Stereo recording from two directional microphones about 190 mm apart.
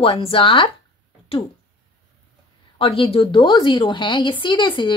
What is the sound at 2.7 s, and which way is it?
Speech, 30° left (ahead or behind).